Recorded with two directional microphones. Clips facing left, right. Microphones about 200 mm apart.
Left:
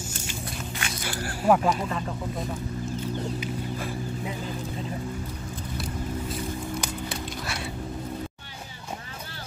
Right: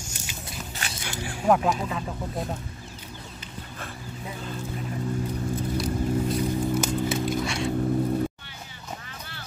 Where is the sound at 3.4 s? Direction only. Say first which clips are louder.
Left 9 dB; 10° left (ahead or behind).